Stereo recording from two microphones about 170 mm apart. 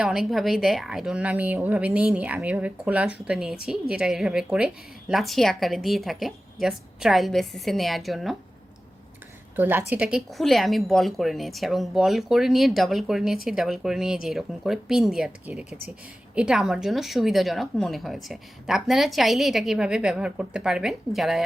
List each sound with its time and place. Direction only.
0.0 s a woman's voice: 5° right (ahead or behind)
9.6 s speech: 10° right (ahead or behind)